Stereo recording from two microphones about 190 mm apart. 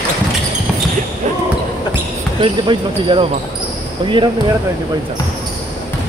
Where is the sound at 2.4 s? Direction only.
25° right (ahead or behind).